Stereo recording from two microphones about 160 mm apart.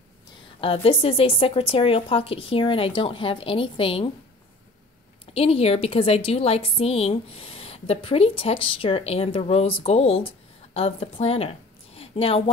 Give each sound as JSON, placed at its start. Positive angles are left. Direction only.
{"t": 0.6, "sound": "a woman's voice", "side_deg": 35}
{"t": 5.2, "sound": "a woman's voice", "side_deg": 35}
{"t": 12.0, "sound": "a sound", "side_deg": 35}